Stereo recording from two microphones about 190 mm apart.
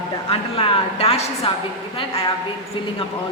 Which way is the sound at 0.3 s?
30° left (ahead or behind).